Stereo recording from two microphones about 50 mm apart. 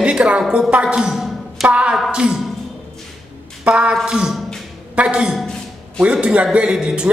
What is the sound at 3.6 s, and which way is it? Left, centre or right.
Speech, right.